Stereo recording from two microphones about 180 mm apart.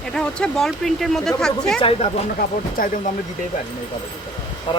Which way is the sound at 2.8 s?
50° left (ahead or behind).